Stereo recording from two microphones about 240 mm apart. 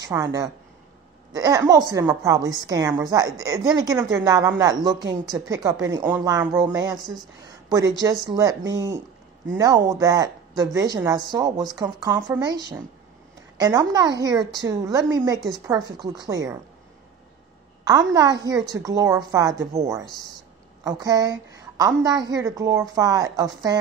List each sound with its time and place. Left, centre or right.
0.0 s a woman's voice: centre
17.8 s a woman's voice: centre
20.8 s a woman's voice: centre